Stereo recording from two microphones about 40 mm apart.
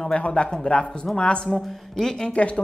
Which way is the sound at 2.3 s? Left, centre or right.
Left.